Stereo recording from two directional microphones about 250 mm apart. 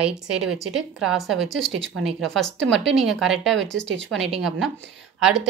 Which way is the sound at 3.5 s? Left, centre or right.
Right.